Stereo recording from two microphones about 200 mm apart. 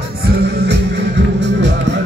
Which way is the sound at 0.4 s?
55° right (ahead or behind).